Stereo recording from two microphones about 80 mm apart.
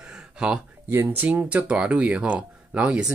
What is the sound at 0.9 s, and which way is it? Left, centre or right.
Mantra, right.